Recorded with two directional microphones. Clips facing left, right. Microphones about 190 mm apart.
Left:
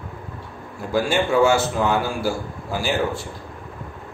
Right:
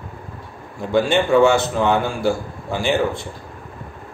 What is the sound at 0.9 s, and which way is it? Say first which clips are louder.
A man's voice: right 4 dB; 5° left (ahead or behind).